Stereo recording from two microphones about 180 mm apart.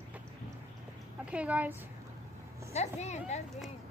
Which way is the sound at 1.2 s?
5° right (ahead or behind).